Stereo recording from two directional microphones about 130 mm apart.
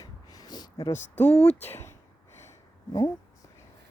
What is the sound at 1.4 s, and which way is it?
Speech, 55° left (ahead or behind).